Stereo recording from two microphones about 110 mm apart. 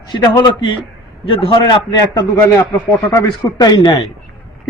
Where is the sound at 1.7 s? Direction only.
40° left (ahead or behind).